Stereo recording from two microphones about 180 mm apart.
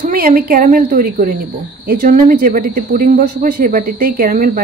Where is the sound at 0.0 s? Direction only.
50° right (ahead or behind).